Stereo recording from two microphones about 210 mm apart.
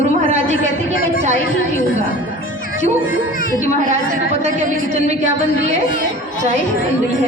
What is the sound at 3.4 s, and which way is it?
Speech, 40° left (ahead or behind).